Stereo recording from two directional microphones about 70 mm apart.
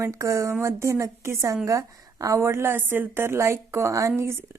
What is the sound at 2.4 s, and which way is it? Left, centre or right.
A woman's voice, right.